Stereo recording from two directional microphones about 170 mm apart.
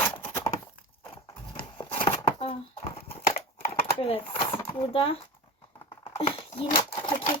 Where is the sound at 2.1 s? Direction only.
35° left (ahead or behind).